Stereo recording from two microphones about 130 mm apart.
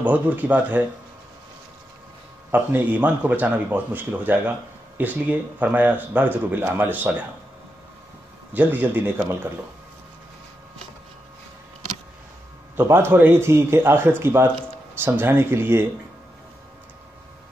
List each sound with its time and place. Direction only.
0.0 s speech: 10° right (ahead or behind)
2.5 s speech: 10° right (ahead or behind)
8.5 s speech: 15° right (ahead or behind)
12.7 s speech: 20° right (ahead or behind)